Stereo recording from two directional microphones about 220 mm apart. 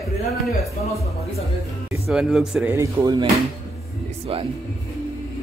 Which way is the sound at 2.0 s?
Centre (ahead or behind).